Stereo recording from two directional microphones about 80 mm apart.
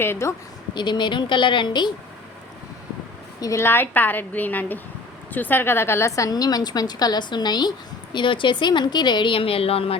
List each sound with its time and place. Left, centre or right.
0.0 s a woman's voice: left
0.7 s speech: left
3.6 s a woman's voice: left
8.1 s speech: left